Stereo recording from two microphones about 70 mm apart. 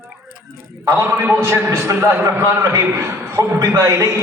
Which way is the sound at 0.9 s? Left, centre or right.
Right.